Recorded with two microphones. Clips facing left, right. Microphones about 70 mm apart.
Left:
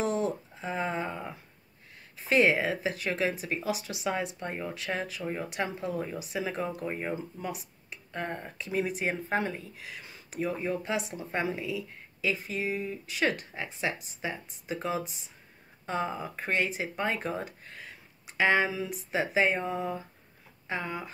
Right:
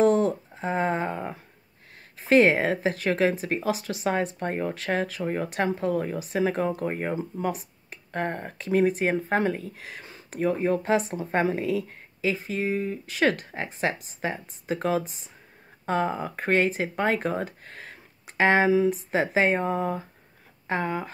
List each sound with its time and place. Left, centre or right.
0.0 s a sound: right
2.1 s speech: right
12.2 s speech: right
18.8 s speech: right